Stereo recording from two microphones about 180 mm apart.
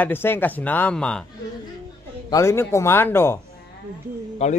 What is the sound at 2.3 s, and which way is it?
A man's voice, 15° left (ahead or behind).